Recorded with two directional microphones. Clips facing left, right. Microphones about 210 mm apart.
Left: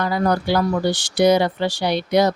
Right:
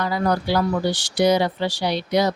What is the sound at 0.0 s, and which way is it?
Speech, 50° left (ahead or behind).